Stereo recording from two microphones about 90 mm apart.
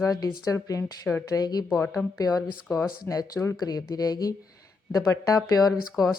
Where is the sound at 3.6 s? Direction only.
45° left (ahead or behind).